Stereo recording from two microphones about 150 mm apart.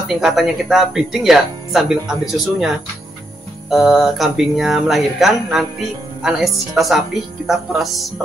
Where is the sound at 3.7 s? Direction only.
Centre (ahead or behind).